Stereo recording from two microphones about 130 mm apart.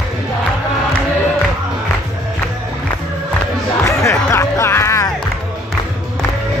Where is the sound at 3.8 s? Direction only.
20° left (ahead or behind).